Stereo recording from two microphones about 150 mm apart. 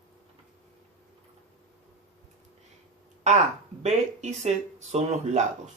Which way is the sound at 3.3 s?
50° right (ahead or behind).